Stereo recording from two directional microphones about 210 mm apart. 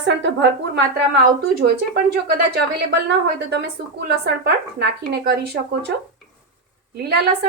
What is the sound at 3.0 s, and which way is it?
A woman's voice, 55° right (ahead or behind).